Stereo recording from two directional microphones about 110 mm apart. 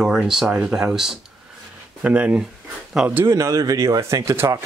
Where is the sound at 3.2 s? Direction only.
30° right (ahead or behind).